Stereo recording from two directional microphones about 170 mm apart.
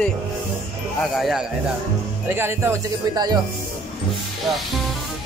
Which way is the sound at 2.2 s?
15° right (ahead or behind).